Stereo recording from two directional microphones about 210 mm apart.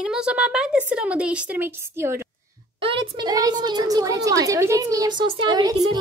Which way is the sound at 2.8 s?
25° right (ahead or behind).